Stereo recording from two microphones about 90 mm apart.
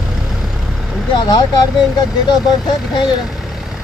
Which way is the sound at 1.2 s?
50° left (ahead or behind).